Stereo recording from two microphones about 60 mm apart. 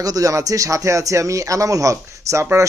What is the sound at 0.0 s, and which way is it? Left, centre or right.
A man's voice, right.